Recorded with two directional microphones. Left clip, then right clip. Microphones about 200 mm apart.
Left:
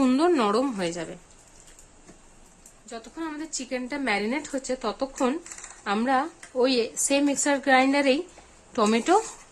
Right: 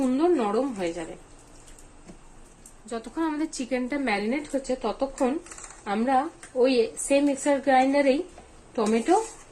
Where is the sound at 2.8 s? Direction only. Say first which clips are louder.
Right 6 dB; 10° right (ahead or behind); by 8.1 s 25° left (ahead or behind).